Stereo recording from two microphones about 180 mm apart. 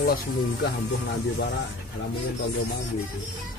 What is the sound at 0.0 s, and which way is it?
Speech, 60° left (ahead or behind).